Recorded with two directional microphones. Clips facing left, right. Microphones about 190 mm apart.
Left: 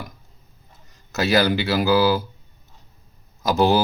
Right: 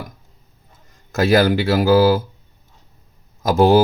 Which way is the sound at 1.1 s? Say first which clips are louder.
Right 4 dB; 50° right (ahead or behind).